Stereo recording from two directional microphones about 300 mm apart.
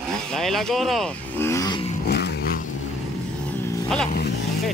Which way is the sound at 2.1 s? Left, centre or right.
Left.